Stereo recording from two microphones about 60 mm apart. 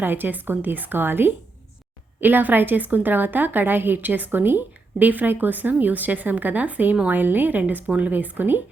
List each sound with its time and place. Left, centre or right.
0.0 s a woman's voice: right